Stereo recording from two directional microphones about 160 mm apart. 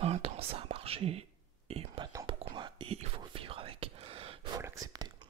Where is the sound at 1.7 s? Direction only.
40° right (ahead or behind).